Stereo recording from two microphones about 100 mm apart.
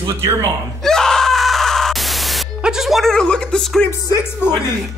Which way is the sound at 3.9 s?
30° left (ahead or behind).